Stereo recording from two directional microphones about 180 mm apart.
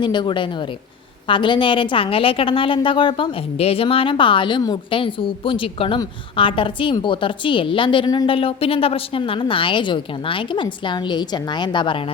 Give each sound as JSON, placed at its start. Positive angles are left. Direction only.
{"t": 0.0, "sound": "a woman's voice", "side_deg": 25}